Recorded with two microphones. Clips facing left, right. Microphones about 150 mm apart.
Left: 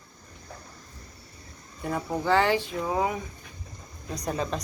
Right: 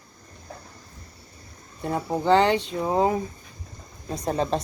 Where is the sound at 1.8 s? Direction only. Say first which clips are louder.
Right 3 dB; 25° right (ahead or behind).